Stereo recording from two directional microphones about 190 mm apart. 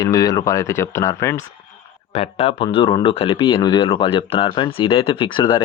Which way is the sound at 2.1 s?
30° left (ahead or behind).